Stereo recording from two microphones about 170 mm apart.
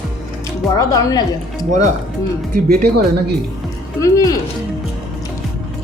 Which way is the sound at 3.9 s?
20° left (ahead or behind).